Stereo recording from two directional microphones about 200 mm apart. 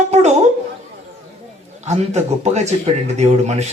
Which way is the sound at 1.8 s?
35° right (ahead or behind).